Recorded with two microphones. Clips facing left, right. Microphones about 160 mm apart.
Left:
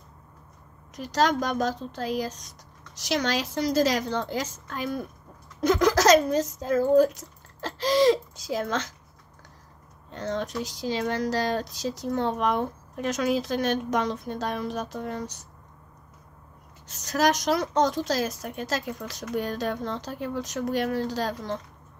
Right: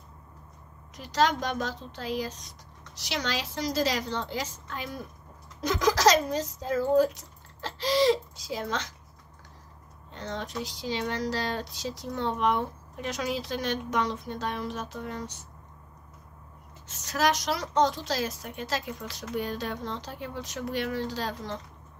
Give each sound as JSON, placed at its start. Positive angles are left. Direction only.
{"t": 0.9, "sound": "speech", "side_deg": 45}
{"t": 10.1, "sound": "speech", "side_deg": 45}
{"t": 16.8, "sound": "speech", "side_deg": 40}